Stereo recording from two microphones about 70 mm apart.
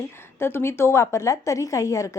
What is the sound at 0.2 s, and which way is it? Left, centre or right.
A woman's voice, left.